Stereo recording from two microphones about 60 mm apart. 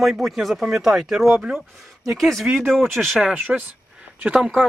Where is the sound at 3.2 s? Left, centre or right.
Right.